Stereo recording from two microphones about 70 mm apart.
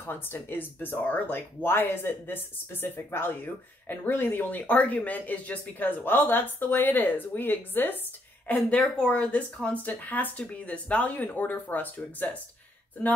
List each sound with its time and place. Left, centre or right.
0.0 s speech: left
8.9 s speech: centre